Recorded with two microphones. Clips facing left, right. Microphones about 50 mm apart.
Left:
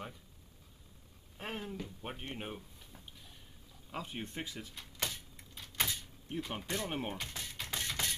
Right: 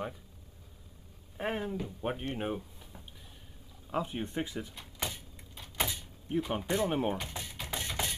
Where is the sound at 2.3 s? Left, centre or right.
Centre.